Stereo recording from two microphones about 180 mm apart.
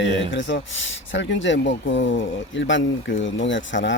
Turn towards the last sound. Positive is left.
turn(degrees=90)